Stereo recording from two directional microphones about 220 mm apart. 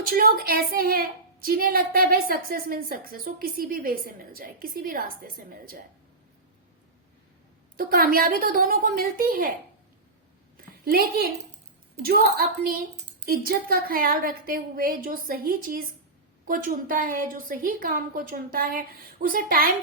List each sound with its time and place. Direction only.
0.1 s a woman's voice: 40° right (ahead or behind)
7.8 s a woman's voice: 40° right (ahead or behind)
10.8 s a woman's voice: 45° right (ahead or behind)